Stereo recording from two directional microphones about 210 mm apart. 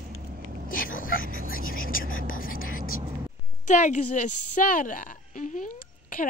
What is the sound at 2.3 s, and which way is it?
Whispering, 40° left (ahead or behind).